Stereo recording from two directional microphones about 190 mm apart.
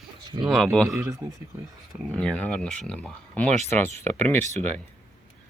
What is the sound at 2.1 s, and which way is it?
Speech, 5° left (ahead or behind).